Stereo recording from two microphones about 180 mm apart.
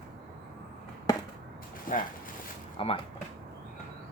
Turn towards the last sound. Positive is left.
turn(degrees=30)  # may be behind; listen again after turning